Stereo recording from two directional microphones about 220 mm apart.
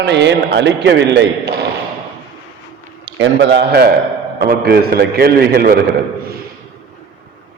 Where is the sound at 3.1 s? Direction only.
55° right (ahead or behind).